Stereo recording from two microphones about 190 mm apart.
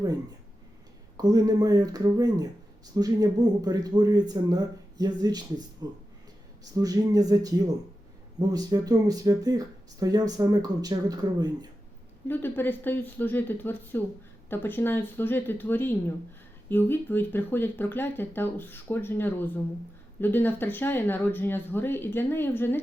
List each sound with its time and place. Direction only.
1.1 s speech: 20° right (ahead or behind)
6.7 s speech: 20° right (ahead or behind)
12.3 s speech: 10° left (ahead or behind)